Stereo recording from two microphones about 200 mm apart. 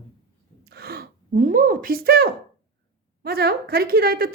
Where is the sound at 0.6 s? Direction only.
50° right (ahead or behind).